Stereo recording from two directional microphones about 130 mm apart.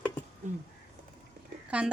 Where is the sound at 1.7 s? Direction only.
10° right (ahead or behind).